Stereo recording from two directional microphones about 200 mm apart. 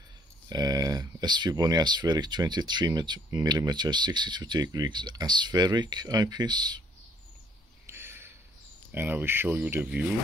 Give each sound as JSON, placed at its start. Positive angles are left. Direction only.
{"t": 0.5, "sound": "speech", "side_deg": -20}
{"t": 7.8, "sound": "a sound", "side_deg": -10}
{"t": 8.9, "sound": "speech", "side_deg": -10}